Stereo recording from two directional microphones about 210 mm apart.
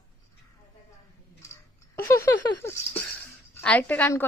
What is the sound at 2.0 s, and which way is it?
Speech, 15° left (ahead or behind).